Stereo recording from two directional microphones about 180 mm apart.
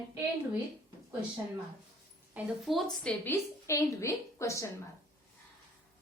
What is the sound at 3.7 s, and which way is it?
Speech, 15° left (ahead or behind).